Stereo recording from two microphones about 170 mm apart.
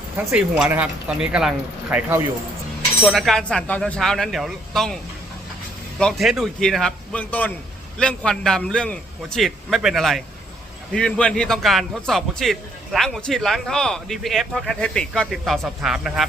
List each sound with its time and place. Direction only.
0.3 s speech: 5° right (ahead or behind)
3.0 s a man's voice: centre (ahead or behind)
6.0 s a man's voice: centre (ahead or behind)